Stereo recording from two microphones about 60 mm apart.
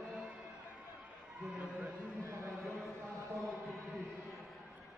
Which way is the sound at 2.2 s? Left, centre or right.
Right.